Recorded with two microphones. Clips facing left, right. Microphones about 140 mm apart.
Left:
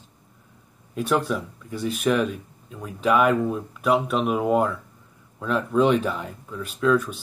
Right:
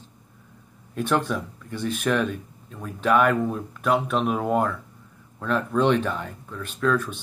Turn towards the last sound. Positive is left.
turn(degrees=5)  # may be behind; listen again after turning